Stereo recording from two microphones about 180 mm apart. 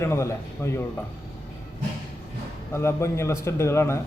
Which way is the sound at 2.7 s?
15° left (ahead or behind).